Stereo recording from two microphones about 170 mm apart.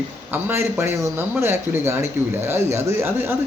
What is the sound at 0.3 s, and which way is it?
A man's voice, 10° right (ahead or behind).